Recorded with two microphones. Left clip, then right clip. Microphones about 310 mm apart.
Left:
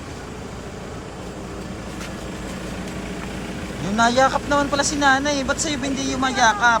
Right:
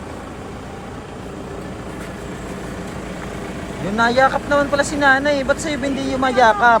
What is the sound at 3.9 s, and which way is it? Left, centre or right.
Speech, centre.